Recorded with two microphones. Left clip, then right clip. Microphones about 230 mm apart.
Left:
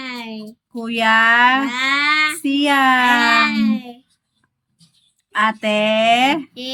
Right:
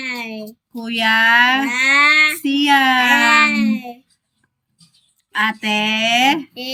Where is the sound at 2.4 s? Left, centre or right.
Centre.